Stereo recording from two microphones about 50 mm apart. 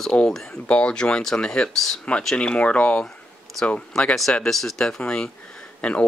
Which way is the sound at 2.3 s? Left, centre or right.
Left.